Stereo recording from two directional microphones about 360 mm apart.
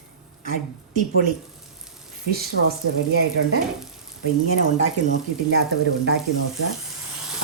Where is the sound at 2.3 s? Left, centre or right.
Right.